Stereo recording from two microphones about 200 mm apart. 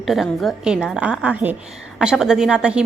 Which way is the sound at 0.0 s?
Centre (ahead or behind).